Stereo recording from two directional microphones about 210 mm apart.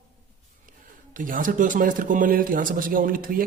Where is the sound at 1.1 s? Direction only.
40° right (ahead or behind).